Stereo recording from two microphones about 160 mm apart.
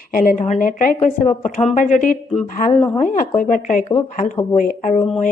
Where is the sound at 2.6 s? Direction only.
45° left (ahead or behind).